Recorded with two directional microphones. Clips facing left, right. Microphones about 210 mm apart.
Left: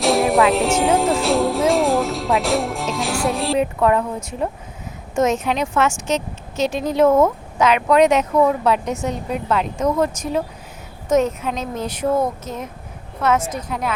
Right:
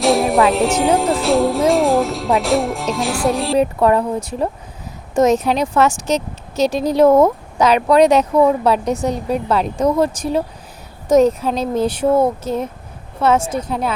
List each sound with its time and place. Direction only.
0.0 s speech: centre (ahead or behind)
3.6 s a woman's voice: 35° right (ahead or behind)